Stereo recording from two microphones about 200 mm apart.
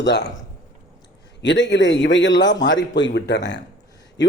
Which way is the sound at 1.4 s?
60° left (ahead or behind).